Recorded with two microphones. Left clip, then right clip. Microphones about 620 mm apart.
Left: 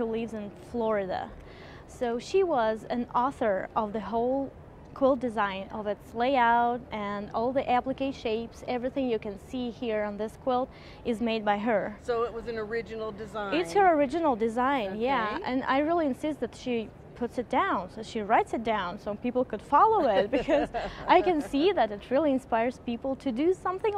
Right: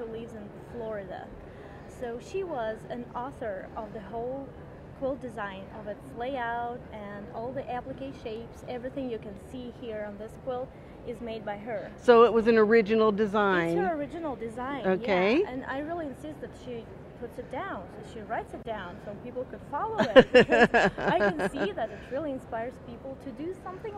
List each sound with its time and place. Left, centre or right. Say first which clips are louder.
0.8 s a woman's voice: left 9 dB; left
5.0 s a woman's voice: left 8 dB; left
11.1 s a woman's voice: left 8 dB; left
12.1 s speech: right 13 dB; right
13.7 s a woman's voice: left 8 dB; left
14.9 s speech: right 3 dB; right
15.4 s a woman's voice: left 7 dB; left
20.0 s a sound: right 6 dB; right
21.1 s a woman's voice: left 3 dB; left